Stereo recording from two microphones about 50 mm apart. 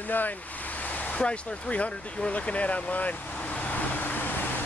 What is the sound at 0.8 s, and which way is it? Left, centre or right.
Vehicle, left.